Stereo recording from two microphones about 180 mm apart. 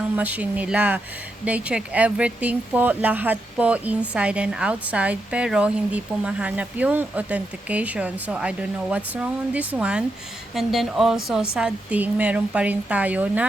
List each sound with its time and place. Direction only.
0.2 s a woman's voice: 10° right (ahead or behind)